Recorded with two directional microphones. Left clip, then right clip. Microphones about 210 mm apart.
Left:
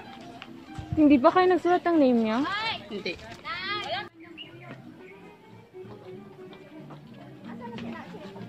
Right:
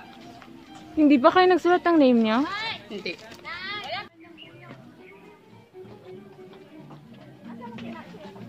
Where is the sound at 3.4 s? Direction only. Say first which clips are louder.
Left 2 dB; 30° left (ahead or behind).